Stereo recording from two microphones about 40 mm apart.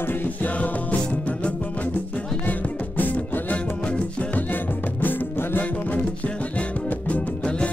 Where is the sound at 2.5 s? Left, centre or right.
Left.